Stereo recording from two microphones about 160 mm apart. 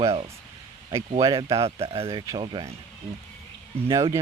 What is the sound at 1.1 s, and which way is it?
Speech, 25° right (ahead or behind).